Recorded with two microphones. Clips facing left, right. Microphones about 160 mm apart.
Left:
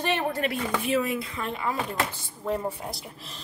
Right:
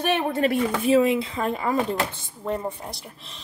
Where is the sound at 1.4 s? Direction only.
45° right (ahead or behind).